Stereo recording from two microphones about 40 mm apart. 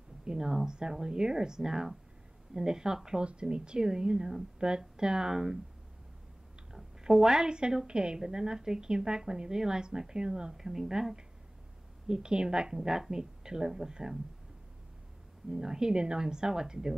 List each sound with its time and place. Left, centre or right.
0.2 s a woman's voice: centre
6.7 s a woman's voice: centre
10.6 s a woman's voice: centre
15.5 s a woman's voice: centre